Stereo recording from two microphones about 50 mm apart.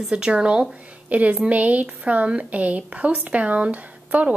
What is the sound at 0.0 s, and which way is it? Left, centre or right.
A woman's voice, centre.